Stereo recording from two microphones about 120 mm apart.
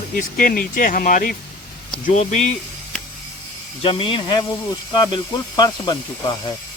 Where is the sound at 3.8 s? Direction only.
50° left (ahead or behind).